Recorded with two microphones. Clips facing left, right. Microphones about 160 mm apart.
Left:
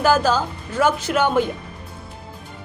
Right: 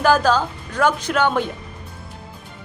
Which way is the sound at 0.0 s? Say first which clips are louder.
Right 1 dB; 5° left (ahead or behind).